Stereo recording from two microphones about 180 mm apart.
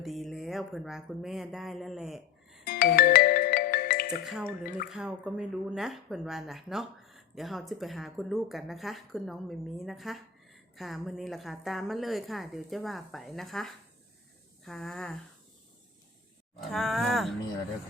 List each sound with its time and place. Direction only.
0.0 s speech: centre (ahead or behind)
2.6 s music: 55° left (ahead or behind)
4.1 s speech: centre (ahead or behind)
16.6 s speech: centre (ahead or behind)